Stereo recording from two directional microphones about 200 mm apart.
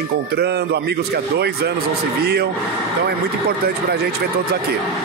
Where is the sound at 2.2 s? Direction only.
55° right (ahead or behind).